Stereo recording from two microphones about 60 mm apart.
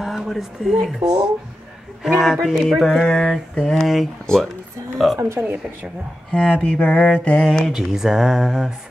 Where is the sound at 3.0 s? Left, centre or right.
Centre.